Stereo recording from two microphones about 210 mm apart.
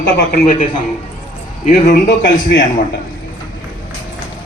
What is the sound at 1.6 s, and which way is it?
Speech, 50° left (ahead or behind).